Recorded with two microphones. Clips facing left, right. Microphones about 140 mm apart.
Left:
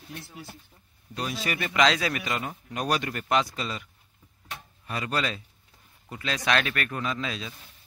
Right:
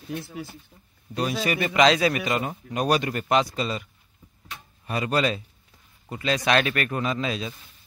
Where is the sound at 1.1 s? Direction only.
10° right (ahead or behind).